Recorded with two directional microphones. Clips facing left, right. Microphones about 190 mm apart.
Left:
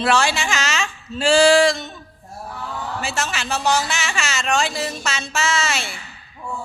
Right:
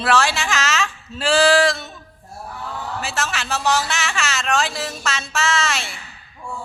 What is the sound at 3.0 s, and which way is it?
A woman's voice, centre (ahead or behind).